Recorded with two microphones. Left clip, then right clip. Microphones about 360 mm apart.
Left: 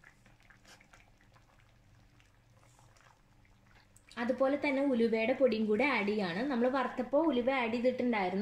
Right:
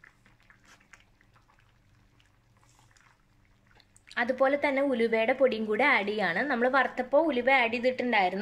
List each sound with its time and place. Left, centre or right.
4.1 s speech: right